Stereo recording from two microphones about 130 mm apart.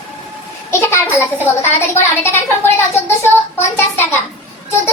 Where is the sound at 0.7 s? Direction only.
20° left (ahead or behind).